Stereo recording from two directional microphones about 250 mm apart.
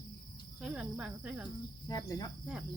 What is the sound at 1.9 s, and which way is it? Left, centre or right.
Cricket, centre.